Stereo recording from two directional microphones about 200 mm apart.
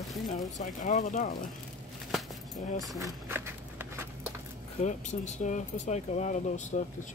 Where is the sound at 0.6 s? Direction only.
40° left (ahead or behind).